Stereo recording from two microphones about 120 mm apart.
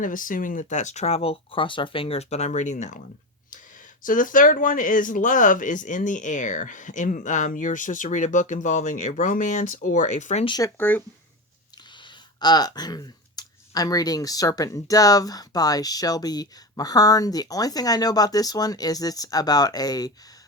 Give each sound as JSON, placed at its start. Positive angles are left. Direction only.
{"t": 0.0, "sound": "speech", "side_deg": 90}
{"t": 4.0, "sound": "speech", "side_deg": 90}
{"t": 10.6, "sound": "speech", "side_deg": 15}
{"t": 12.0, "sound": "speech", "side_deg": 35}